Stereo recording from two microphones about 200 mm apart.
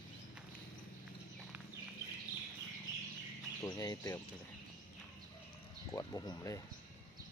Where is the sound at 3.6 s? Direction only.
20° left (ahead or behind).